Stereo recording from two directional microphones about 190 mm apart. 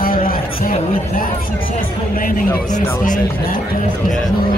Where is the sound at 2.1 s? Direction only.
45° left (ahead or behind).